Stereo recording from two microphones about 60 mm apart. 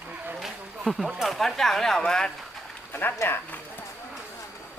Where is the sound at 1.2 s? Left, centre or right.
Centre.